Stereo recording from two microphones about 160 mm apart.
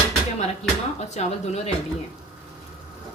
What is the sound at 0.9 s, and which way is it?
Speech, 45° left (ahead or behind).